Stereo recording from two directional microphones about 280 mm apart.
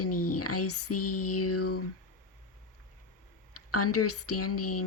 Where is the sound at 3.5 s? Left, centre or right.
Left.